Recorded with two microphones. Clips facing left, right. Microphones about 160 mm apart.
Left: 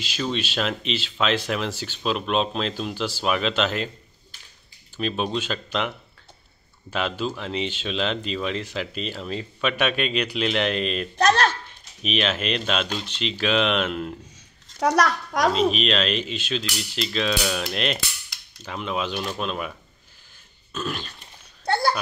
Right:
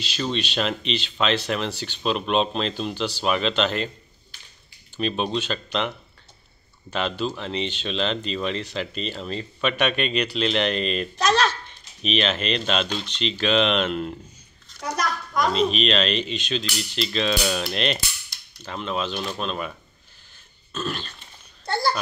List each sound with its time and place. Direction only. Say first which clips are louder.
0.0 s speech: even; 5° left (ahead or behind)
4.9 s speech: right 1 dB; 5° left (ahead or behind)
11.1 s speech: left 2 dB; 55° left (ahead or behind)
12.0 s speech: right 1 dB; 5° left (ahead or behind)
14.8 s a child's voice: left 7 dB; 80° left
15.7 s speech: right 1 dB; 5° left (ahead or behind)
20.7 s speech: even; 10° left (ahead or behind)
21.6 s babbling: left 2 dB; 60° left (ahead or behind)